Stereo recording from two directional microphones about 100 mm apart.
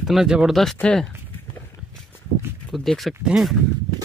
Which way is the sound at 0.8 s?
10° left (ahead or behind).